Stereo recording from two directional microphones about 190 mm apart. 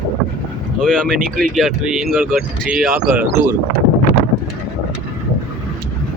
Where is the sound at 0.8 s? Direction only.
5° left (ahead or behind).